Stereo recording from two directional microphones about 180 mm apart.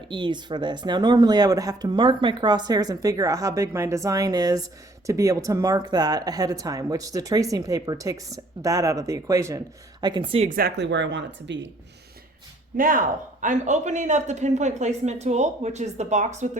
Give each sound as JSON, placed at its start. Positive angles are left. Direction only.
{"t": 0.1, "sound": "speech", "side_deg": -25}
{"t": 10.5, "sound": "speech", "side_deg": -65}
{"t": 12.7, "sound": "speech", "side_deg": -50}